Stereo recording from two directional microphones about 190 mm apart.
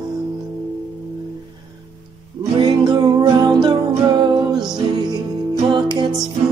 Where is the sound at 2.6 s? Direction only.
20° right (ahead or behind).